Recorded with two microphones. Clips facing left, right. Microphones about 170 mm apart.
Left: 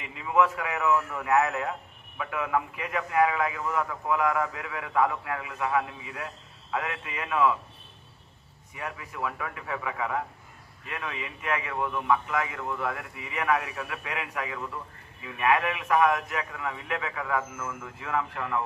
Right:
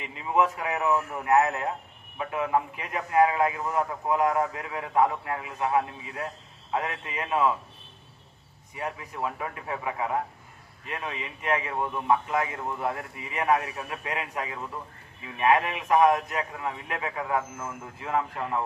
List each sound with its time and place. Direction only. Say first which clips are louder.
0.2 s a man's voice: left 1 dB; 30° right (ahead or behind)
8.8 s a man's voice: right 2 dB; 25° right (ahead or behind)